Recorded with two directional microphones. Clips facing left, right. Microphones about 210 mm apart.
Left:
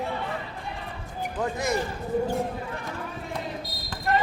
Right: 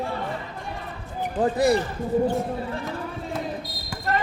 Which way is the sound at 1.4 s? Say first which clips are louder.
Right 7 dB; 35° right (ahead or behind).